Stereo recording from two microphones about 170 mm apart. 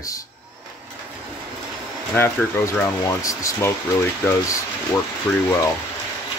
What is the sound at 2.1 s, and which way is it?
Speech, 15° left (ahead or behind).